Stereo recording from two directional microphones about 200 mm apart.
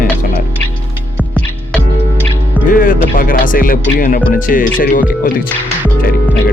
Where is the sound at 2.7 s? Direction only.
45° left (ahead or behind).